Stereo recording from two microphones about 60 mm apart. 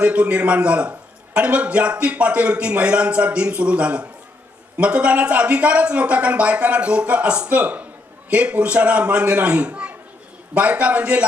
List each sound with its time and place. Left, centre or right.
0.0 s a man's voice: right